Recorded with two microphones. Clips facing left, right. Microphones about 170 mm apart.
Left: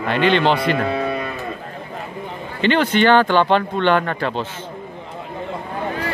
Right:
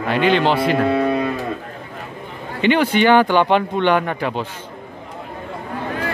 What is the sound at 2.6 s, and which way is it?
Speech, 10° right (ahead or behind).